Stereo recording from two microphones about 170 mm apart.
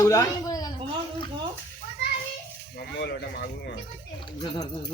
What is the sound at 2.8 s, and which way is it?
Speech, 75° left (ahead or behind).